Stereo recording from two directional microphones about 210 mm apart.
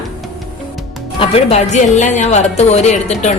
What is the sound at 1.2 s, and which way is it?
A woman's voice, 30° left (ahead or behind).